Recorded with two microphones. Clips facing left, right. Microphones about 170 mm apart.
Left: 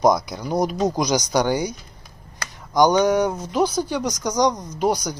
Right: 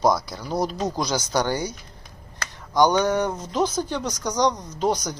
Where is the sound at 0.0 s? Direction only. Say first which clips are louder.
Left 3 dB; 15° left (ahead or behind).